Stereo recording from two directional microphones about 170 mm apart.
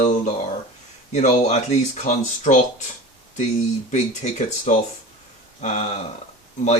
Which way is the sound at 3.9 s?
40° left (ahead or behind).